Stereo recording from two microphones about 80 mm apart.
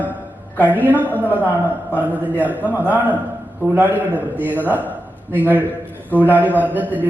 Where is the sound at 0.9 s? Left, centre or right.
Right.